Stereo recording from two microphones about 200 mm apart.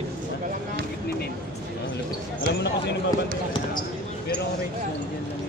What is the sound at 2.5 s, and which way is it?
Speech, 55° left (ahead or behind).